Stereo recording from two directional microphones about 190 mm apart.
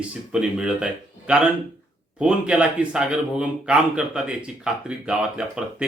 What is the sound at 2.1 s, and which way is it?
Speech, 5° right (ahead or behind).